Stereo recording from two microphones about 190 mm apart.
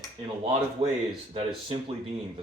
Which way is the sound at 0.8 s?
30° right (ahead or behind).